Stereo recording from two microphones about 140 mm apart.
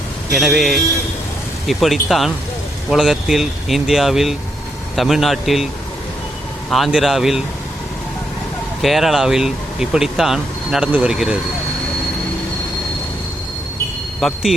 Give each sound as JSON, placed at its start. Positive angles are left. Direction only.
{"t": 0.3, "sound": "speech", "side_deg": 0}
{"t": 6.7, "sound": "speech", "side_deg": 0}
{"t": 8.8, "sound": "speech", "side_deg": 0}
{"t": 14.2, "sound": "speech", "side_deg": 5}